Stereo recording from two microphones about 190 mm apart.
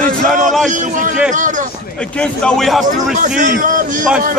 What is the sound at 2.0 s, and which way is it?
Speech, 5° left (ahead or behind).